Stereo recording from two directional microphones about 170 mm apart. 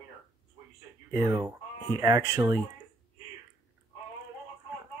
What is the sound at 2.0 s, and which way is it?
Speech, 20° right (ahead or behind).